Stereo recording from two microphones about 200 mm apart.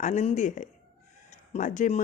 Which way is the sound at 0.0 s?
35° left (ahead or behind).